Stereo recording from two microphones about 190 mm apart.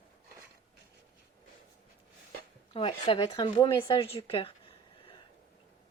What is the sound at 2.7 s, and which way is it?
Speech, 25° left (ahead or behind).